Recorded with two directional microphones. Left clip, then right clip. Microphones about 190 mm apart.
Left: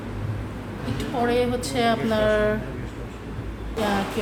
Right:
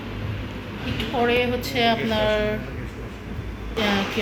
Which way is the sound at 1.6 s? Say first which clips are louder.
Right 1 dB; 20° left (ahead or behind).